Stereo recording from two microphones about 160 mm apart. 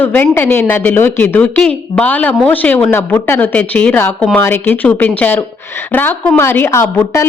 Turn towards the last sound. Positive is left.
turn(degrees=15)  # may be behind; listen again after turning